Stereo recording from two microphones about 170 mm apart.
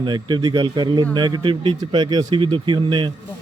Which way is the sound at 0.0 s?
25° right (ahead or behind).